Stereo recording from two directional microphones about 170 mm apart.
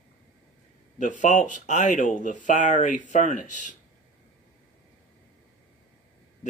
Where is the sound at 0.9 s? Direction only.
45° left (ahead or behind).